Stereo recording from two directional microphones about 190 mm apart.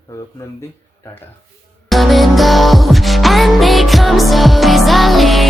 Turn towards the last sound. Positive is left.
turn(degrees=0)  # may be behind; listen again after turning